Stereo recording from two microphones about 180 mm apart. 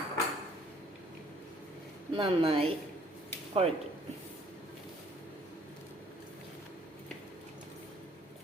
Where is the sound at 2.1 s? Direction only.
30° right (ahead or behind).